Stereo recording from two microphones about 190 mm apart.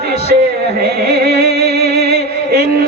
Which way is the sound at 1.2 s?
55° right (ahead or behind).